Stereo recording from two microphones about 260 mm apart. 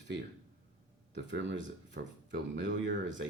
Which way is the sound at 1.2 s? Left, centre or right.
Right.